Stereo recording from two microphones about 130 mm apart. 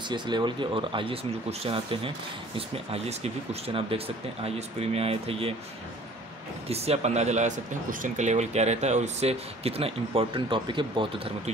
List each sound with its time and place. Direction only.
0.1 s speech: 35° right (ahead or behind)
6.7 s speech: 50° right (ahead or behind)